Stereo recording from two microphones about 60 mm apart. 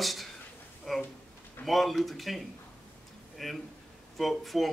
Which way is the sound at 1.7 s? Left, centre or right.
Centre.